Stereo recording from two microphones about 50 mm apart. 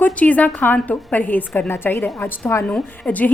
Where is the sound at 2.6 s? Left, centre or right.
Left.